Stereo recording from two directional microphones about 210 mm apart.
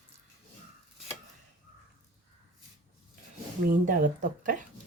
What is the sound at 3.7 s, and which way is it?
Speech, 40° right (ahead or behind).